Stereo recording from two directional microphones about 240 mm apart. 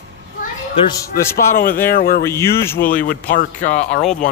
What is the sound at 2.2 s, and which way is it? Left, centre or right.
Speech, centre.